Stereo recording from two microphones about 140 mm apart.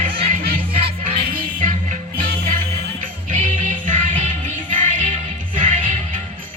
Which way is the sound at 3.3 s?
65° right (ahead or behind).